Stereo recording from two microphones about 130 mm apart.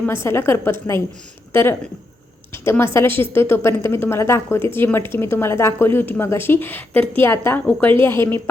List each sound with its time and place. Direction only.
0.0 s a woman's voice: 20° left (ahead or behind)
2.5 s a woman's voice: 20° left (ahead or behind)